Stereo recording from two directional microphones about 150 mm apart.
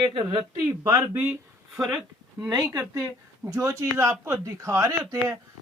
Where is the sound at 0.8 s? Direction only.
20° right (ahead or behind).